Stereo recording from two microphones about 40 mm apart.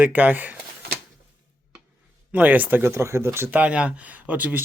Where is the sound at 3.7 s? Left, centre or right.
Right.